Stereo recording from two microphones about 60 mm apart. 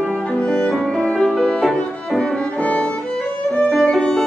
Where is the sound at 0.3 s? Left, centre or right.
Centre.